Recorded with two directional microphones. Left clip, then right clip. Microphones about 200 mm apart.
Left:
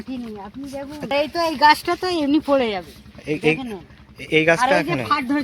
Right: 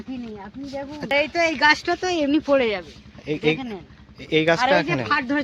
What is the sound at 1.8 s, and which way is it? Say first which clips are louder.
Speech: left 1 dB; 25° left (ahead or behind).